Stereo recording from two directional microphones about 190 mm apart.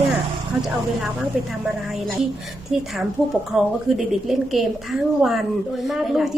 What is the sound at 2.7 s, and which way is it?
A woman's voice, 5° right (ahead or behind).